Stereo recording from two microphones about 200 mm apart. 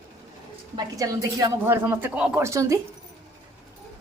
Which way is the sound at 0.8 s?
20° right (ahead or behind).